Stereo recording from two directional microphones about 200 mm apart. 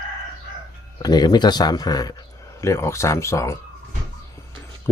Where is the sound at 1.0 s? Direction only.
20° left (ahead or behind).